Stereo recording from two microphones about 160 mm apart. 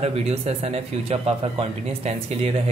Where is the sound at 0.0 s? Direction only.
40° right (ahead or behind).